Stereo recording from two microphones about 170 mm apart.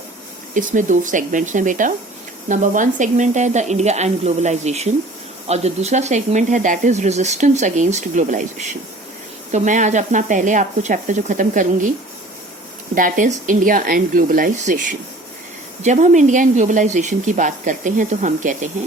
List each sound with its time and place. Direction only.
0.5 s speech: 50° right (ahead or behind)
12.9 s speech: 50° right (ahead or behind)